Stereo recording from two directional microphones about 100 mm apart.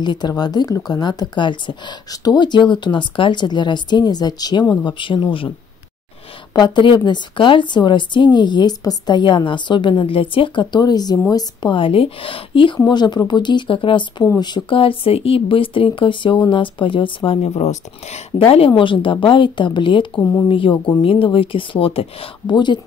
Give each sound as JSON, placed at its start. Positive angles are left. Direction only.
{"t": 0.0, "sound": "a woman's voice", "side_deg": 50}
{"t": 4.8, "sound": "speech", "side_deg": 55}
{"t": 6.5, "sound": "a woman's voice", "side_deg": 45}
{"t": 11.8, "sound": "a woman's voice", "side_deg": 65}
{"t": 14.8, "sound": "speech", "side_deg": 70}
{"t": 18.7, "sound": "speech", "side_deg": 55}
{"t": 22.5, "sound": "a woman's voice", "side_deg": 50}